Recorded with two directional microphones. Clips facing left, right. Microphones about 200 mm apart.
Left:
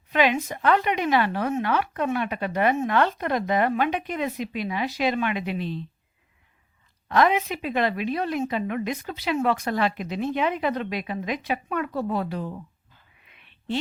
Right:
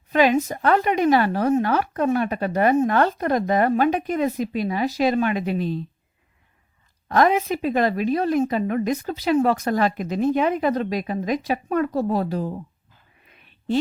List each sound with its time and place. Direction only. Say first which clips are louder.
0.1 s speech: right 4 dB; 40° right (ahead or behind)
7.1 s speech: right 3 dB; 45° right (ahead or behind)
13.2 s a sound: right 5 dB; 40° right (ahead or behind)